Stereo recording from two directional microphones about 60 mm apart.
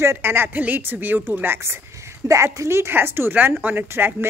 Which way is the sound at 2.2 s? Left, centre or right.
Right.